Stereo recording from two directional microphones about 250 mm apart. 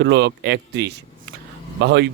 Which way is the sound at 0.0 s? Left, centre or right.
Right.